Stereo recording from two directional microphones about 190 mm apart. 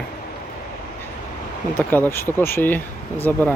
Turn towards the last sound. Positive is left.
turn(degrees=10)  # may be behind; listen again after turning